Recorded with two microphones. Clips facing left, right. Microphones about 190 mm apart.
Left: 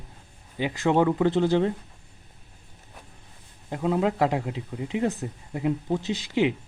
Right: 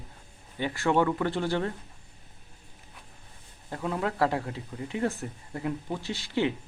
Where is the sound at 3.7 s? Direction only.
20° left (ahead or behind).